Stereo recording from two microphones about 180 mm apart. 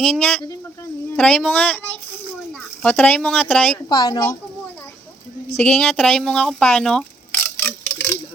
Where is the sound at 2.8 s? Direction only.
5° left (ahead or behind).